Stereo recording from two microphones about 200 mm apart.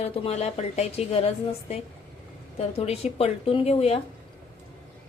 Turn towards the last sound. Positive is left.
turn(degrees=30)  # may be behind; listen again after turning